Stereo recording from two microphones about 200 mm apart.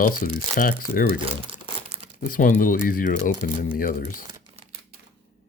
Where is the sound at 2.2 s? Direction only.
40° left (ahead or behind).